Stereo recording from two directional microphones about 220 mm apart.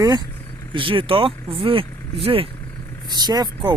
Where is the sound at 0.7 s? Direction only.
25° right (ahead or behind).